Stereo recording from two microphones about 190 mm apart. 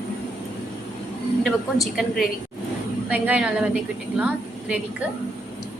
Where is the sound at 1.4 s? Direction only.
Centre (ahead or behind).